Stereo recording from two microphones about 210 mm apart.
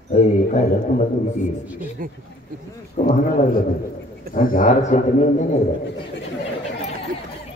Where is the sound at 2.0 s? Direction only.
40° right (ahead or behind).